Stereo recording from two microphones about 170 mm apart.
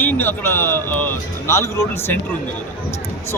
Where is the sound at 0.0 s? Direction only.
10° left (ahead or behind).